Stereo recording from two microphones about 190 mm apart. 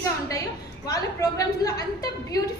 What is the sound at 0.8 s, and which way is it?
Speech, 20° left (ahead or behind).